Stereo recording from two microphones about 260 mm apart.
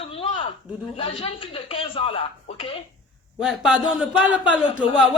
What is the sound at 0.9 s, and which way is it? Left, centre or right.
Speech, left.